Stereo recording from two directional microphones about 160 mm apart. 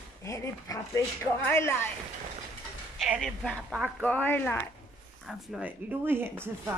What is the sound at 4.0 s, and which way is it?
Speech, 10° left (ahead or behind).